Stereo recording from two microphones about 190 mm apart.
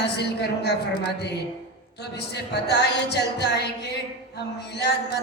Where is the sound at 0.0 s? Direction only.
60° left (ahead or behind).